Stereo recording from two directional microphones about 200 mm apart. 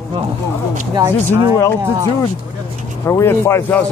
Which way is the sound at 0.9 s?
20° right (ahead or behind).